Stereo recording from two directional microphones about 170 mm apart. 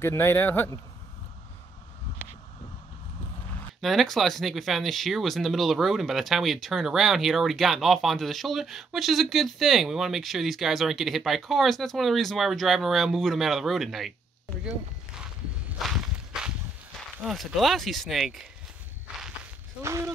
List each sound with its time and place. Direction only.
0.0 s a man's voice: 15° left (ahead or behind)
3.8 s speech: centre (ahead or behind)
15.8 s walk: centre (ahead or behind)
17.2 s speech: centre (ahead or behind)
19.8 s speech: 15° right (ahead or behind)